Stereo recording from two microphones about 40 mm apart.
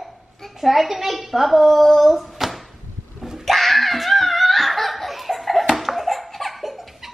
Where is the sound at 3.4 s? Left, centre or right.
Centre.